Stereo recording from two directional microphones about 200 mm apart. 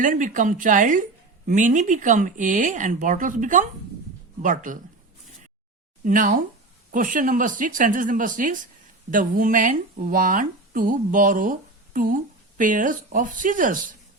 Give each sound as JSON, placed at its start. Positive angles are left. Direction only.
{"t": 0.0, "sound": "speech", "side_deg": -40}
{"t": 6.1, "sound": "a woman's voice", "side_deg": -40}